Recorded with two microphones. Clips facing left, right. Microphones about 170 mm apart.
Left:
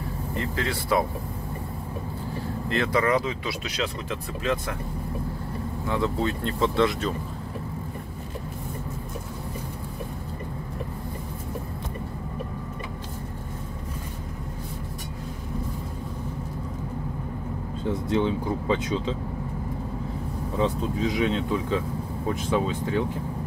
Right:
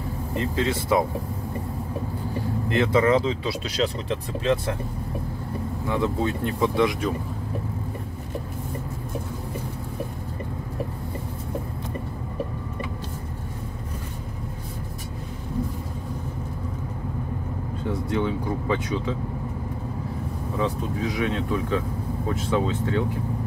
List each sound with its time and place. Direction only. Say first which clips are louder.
0.3 s speech: right 4 dB; 20° right (ahead or behind)
2.7 s speech: right 4 dB; 20° right (ahead or behind)
5.9 s speech: right 1 dB; 15° right (ahead or behind)
18.1 s speech: left 2 dB; 25° left (ahead or behind)
20.5 s speech: left 1 dB; 20° left (ahead or behind)